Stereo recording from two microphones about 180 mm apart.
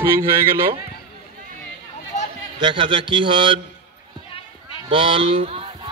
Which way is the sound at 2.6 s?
25° right (ahead or behind).